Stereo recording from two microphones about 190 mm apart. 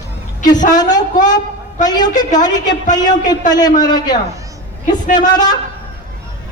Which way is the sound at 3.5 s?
20° left (ahead or behind).